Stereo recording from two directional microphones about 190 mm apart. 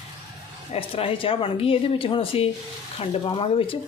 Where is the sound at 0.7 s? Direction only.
30° left (ahead or behind).